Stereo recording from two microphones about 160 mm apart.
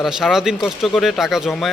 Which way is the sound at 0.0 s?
Centre (ahead or behind).